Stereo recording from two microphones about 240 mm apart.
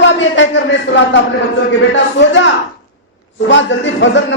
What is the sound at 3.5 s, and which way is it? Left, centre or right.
Speech, left.